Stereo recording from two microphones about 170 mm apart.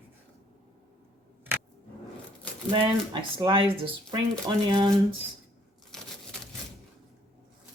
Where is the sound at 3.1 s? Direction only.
25° right (ahead or behind).